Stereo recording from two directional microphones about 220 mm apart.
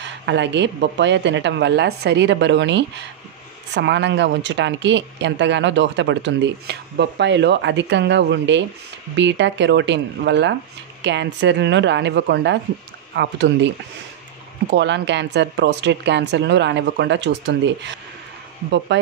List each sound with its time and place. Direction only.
0.0 s speech: 55° right (ahead or behind)
14.7 s speech: 55° right (ahead or behind)